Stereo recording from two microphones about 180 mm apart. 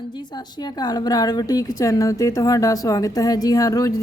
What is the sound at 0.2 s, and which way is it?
A woman's voice, 20° left (ahead or behind).